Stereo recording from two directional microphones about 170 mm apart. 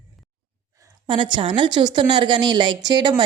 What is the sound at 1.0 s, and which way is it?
A woman's voice, 30° right (ahead or behind).